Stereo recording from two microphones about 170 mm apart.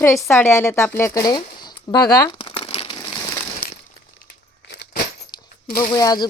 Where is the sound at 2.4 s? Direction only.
35° left (ahead or behind).